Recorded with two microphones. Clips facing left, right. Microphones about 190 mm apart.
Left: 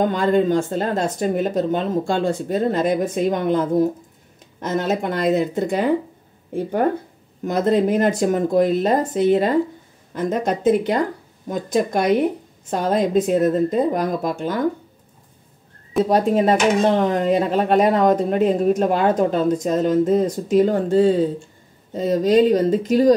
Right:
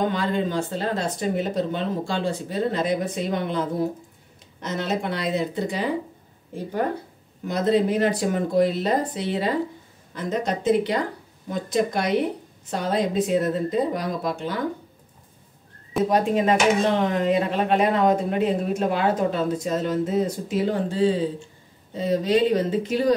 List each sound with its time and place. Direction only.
0.0 s speech: 45° left (ahead or behind)
7.4 s speech: 50° left (ahead or behind)
16.1 s speech: 40° left (ahead or behind)